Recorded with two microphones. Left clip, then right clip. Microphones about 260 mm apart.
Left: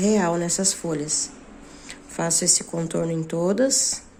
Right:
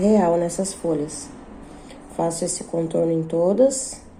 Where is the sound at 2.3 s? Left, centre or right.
Left.